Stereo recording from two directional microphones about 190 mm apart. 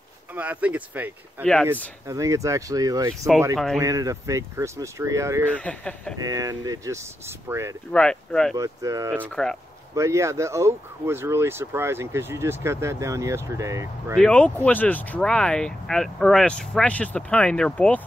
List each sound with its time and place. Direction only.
0.3 s speech: 5° right (ahead or behind)
1.4 s speech: 5° left (ahead or behind)
1.7 s speech: 15° right (ahead or behind)
5.5 s speech: 5° left (ahead or behind)
6.2 s speech: 20° right (ahead or behind)
7.9 s speech: 5° left (ahead or behind)
8.5 s speech: 15° right (ahead or behind)
9.3 s speech: 5° left (ahead or behind)
9.9 s speech: 15° right (ahead or behind)
14.1 s speech: 5° left (ahead or behind)